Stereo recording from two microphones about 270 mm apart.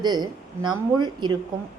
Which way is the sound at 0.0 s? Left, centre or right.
Centre.